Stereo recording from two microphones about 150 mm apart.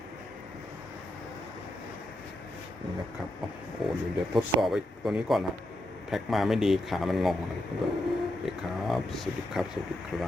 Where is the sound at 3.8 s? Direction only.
Centre (ahead or behind).